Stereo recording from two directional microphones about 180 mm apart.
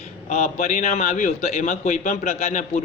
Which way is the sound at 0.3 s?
45° left (ahead or behind).